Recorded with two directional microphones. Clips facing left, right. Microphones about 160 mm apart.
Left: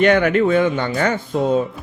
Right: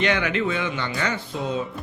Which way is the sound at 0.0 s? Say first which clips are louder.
Left 9 dB; 50° left (ahead or behind).